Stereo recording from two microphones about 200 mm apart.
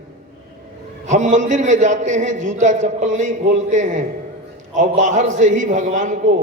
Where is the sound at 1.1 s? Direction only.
40° right (ahead or behind).